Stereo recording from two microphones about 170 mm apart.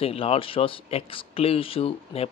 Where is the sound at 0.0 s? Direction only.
35° left (ahead or behind).